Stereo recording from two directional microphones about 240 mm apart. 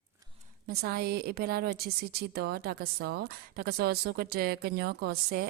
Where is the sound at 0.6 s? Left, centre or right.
Right.